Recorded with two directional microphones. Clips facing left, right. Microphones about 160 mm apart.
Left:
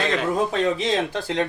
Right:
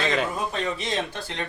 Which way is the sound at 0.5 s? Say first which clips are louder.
Left 6 dB; 90° left.